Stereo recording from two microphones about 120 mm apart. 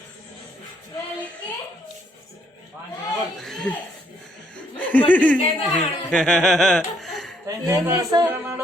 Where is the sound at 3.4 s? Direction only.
5° left (ahead or behind).